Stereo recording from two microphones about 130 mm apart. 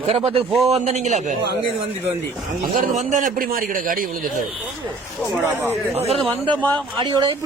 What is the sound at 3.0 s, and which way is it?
A man's voice, 80° right.